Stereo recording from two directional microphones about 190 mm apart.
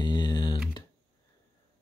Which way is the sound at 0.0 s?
20° left (ahead or behind).